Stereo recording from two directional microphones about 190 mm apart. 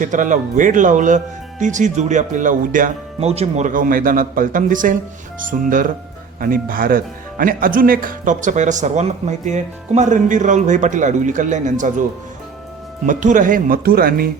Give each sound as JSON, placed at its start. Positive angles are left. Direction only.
{"t": 0.0, "sound": "speech", "side_deg": -45}
{"t": 13.1, "sound": "speech", "side_deg": -40}